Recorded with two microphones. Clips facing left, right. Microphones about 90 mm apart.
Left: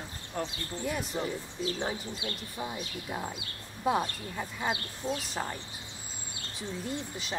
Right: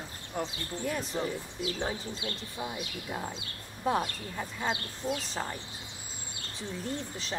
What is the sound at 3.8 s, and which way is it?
Speech, 10° left (ahead or behind).